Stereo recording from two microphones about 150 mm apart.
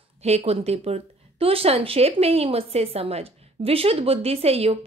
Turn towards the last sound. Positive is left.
turn(degrees=-40)  # may be behind; listen again after turning